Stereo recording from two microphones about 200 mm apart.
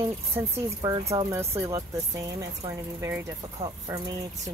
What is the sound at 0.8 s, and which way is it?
Speech, 15° right (ahead or behind).